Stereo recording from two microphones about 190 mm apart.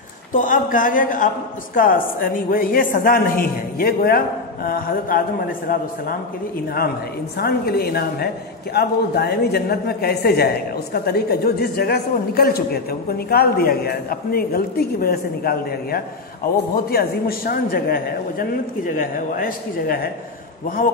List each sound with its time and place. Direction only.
0.3 s a man's voice: 45° left (ahead or behind)
7.3 s a woman's voice: 55° left (ahead or behind)